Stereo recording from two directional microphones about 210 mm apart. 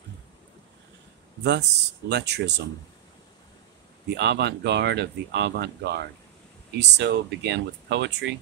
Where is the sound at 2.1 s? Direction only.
55° right (ahead or behind).